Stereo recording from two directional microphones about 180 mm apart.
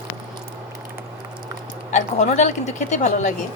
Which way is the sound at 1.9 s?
40° left (ahead or behind).